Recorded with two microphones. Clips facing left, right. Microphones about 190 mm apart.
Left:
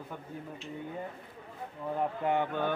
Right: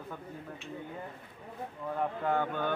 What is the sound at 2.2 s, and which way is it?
Mantra, 15° left (ahead or behind).